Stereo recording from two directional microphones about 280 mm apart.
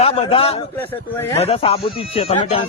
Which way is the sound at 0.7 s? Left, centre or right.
Centre.